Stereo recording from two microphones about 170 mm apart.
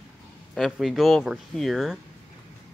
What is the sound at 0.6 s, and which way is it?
Speech, centre (ahead or behind).